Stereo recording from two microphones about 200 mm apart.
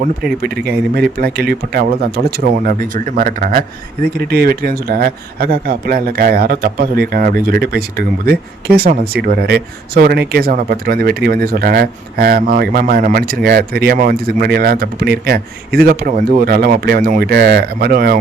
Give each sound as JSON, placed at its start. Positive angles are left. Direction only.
{"t": 0.0, "sound": "a man's voice", "side_deg": -50}